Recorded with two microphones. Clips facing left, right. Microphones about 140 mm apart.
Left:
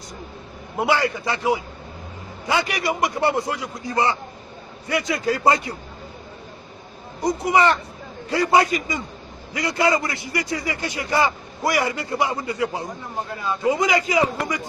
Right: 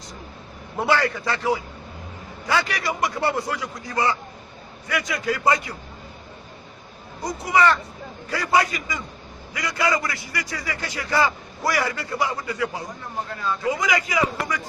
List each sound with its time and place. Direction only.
0.7 s a man's voice: 15° left (ahead or behind)
7.2 s a man's voice: 20° left (ahead or behind)
13.7 s a man's voice: 25° left (ahead or behind)